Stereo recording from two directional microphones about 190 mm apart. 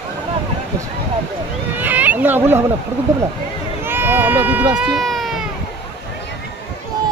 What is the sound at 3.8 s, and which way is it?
Run, 10° right (ahead or behind).